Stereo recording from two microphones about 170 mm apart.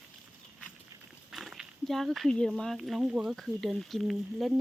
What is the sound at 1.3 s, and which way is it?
Speech, centre (ahead or behind).